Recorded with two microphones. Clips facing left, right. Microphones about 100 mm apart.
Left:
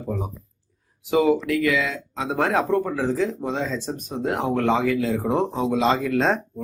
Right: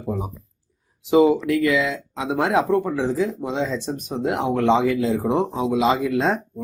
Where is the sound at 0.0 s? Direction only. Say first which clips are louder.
Right 1 dB; 15° right (ahead or behind).